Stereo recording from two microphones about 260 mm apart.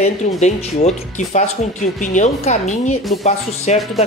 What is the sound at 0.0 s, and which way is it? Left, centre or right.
Speech, left.